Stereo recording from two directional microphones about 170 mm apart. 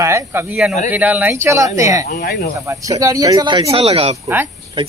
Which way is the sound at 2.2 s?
65° left (ahead or behind).